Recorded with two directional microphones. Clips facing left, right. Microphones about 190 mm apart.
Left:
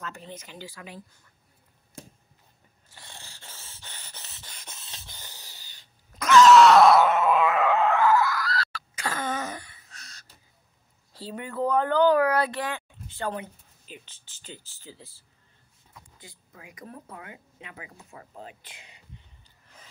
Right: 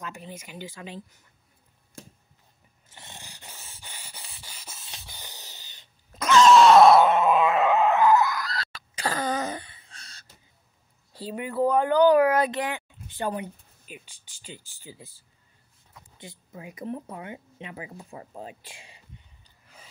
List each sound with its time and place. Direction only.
0.0 s speech: 10° right (ahead or behind)
2.9 s a sound: 20° right (ahead or behind)
9.0 s throat clearing: 35° right (ahead or behind)
11.1 s speech: 15° right (ahead or behind)
16.2 s speech: 25° right (ahead or behind)